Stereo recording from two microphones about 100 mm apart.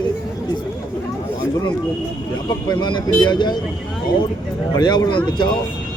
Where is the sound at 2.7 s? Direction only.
45° left (ahead or behind).